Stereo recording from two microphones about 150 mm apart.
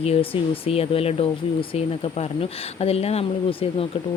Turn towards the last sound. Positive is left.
turn(degrees=40)  # may be behind; listen again after turning